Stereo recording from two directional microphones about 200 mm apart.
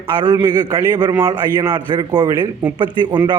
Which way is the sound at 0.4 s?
20° right (ahead or behind).